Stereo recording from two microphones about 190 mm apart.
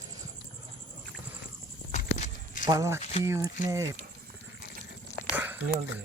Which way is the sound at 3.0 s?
30° left (ahead or behind).